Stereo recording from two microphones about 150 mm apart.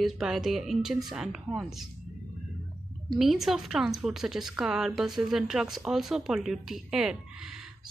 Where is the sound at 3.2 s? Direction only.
Centre (ahead or behind).